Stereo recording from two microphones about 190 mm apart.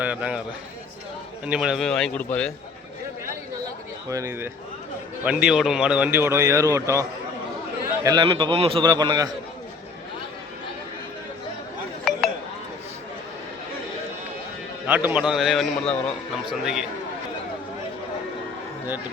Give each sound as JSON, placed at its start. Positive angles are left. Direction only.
{"t": 0.0, "sound": "a man's voice", "side_deg": -5}
{"t": 1.5, "sound": "a man's voice", "side_deg": -5}
{"t": 4.1, "sound": "speech", "side_deg": -15}
{"t": 8.0, "sound": "a man's voice", "side_deg": -25}
{"t": 14.8, "sound": "a man's voice", "side_deg": -10}